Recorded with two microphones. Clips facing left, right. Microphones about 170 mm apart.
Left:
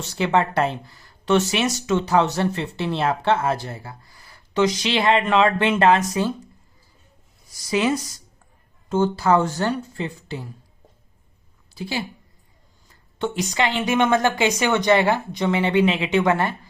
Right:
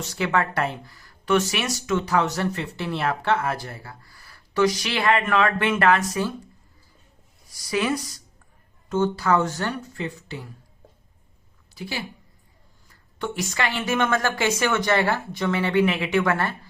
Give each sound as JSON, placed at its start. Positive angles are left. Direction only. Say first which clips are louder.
{"t": 0.2, "sound": "speech", "louder": "left 4 dB", "side_deg": 25}
{"t": 7.7, "sound": "speech", "louder": "left 3 dB", "side_deg": 25}
{"t": 11.7, "sound": "a woman's voice", "louder": "left 4 dB", "side_deg": 25}